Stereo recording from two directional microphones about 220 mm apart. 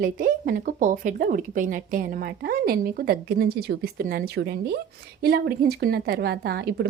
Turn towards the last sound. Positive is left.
turn(degrees=-45)  # may be behind; listen again after turning